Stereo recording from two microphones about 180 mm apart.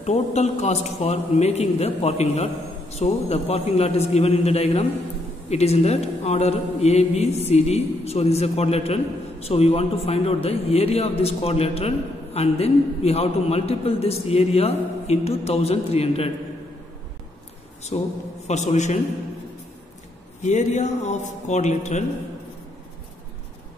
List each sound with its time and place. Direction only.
0.0 s a man's voice: 40° left (ahead or behind)
17.9 s a man's voice: 35° left (ahead or behind)
20.4 s a man's voice: 40° left (ahead or behind)